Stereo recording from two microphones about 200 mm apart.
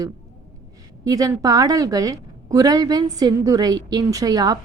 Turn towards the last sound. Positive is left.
turn(degrees=-20)  # may be behind; listen again after turning